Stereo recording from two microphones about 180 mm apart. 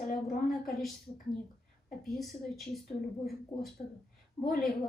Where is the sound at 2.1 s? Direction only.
Centre (ahead or behind).